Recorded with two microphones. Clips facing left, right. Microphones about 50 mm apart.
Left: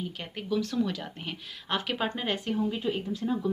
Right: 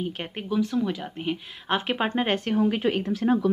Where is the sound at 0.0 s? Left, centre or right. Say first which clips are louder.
Right 5 dB; right.